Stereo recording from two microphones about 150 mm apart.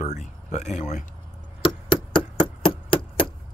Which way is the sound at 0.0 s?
50° left (ahead or behind).